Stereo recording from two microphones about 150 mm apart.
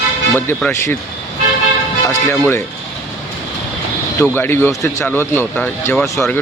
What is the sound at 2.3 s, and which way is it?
Speech, 15° left (ahead or behind).